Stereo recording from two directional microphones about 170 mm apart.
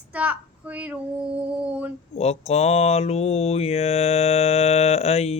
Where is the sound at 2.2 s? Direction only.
40° left (ahead or behind).